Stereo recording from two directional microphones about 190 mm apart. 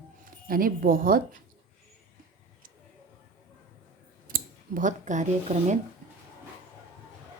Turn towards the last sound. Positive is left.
turn(degrees=-40)  # may be behind; listen again after turning